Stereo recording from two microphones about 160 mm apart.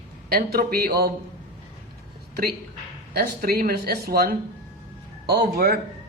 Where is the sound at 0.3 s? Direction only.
75° right (ahead or behind).